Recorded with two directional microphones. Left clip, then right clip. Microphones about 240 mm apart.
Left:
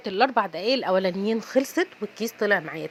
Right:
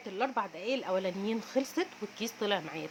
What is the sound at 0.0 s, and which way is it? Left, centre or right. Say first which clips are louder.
A woman's voice: left 11 dB; left.